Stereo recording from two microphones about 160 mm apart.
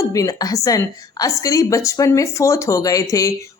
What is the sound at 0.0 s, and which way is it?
A woman's voice, 20° left (ahead or behind).